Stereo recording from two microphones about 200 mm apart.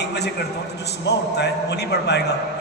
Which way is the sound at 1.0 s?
55° left (ahead or behind).